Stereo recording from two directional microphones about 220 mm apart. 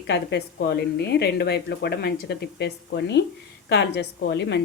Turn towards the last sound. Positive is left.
turn(degrees=50)  # may be behind; listen again after turning